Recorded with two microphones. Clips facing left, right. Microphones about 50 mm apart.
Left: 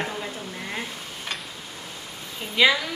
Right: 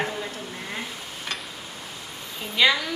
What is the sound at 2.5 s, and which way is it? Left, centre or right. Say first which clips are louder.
Speech: left 1 dB; centre.